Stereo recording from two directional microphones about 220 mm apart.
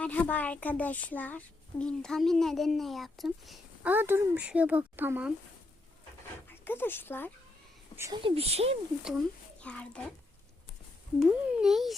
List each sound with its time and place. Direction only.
0.0 s a woman's voice: 5° left (ahead or behind); by 5.3 s 10° right (ahead or behind)
6.5 s speech: 10° left (ahead or behind)
7.9 s speech: 15° right (ahead or behind)
8.2 s speech: 25° right (ahead or behind)
9.0 s speech: centre (ahead or behind)
11.2 s a woman's voice: 5° right (ahead or behind)